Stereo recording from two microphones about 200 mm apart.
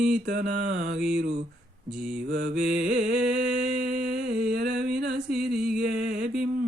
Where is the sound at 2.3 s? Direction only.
45° right (ahead or behind).